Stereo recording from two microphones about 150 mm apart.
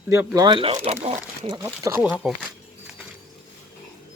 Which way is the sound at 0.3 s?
30° right (ahead or behind).